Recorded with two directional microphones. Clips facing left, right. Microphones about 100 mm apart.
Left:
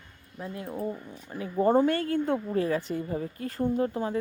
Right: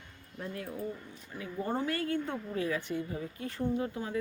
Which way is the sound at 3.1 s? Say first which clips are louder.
Left 6 dB; 50° left (ahead or behind).